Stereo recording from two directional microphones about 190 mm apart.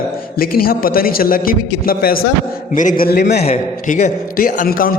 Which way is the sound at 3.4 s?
35° left (ahead or behind).